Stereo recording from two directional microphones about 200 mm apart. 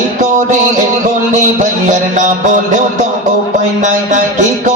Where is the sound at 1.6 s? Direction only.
40° right (ahead or behind).